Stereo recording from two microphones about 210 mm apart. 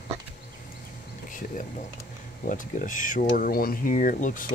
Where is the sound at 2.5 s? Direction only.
40° left (ahead or behind).